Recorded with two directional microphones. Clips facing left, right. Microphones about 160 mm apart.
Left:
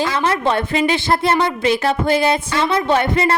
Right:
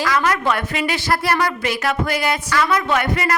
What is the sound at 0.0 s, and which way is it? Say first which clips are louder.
A woman's voice: left 1 dB; 30° left (ahead or behind).